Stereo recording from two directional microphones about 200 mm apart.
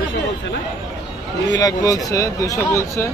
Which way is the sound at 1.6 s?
15° left (ahead or behind).